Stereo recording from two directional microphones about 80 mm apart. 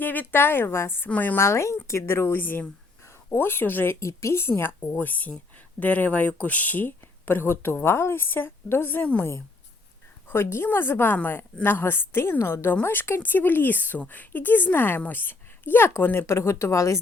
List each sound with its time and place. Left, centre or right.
0.0 s a woman's voice: left
4.0 s a woman's voice: left
10.2 s a woman's voice: left